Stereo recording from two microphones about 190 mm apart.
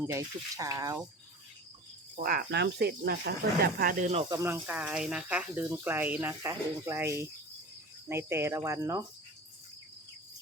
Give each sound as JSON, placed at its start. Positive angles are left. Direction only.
{"t": 0.1, "sound": "speech", "side_deg": -15}
{"t": 2.1, "sound": "speech", "side_deg": -50}
{"t": 4.3, "sound": "speech", "side_deg": -15}